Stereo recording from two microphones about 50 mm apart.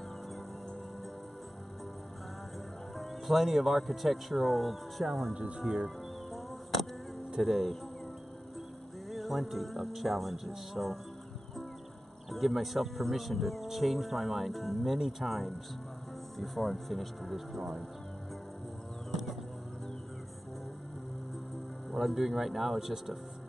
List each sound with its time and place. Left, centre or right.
3.0 s speech: centre
5.3 s speech: centre
6.3 s a sound: centre
7.2 s speech: centre
9.1 s speech: centre
12.3 s speech: centre
21.9 s speech: centre